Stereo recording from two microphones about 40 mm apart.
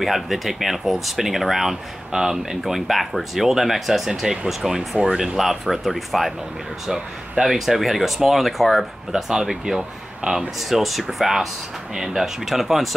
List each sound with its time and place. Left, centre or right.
0.0 s speech: centre
2.6 s speech: centre
7.4 s speech: centre
9.1 s speech: centre
10.6 s speech: centre